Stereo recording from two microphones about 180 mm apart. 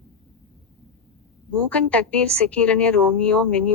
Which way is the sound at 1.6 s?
5° left (ahead or behind).